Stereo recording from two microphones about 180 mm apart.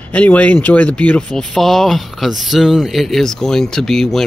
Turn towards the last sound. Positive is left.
turn(degrees=0)  # may be behind; listen again after turning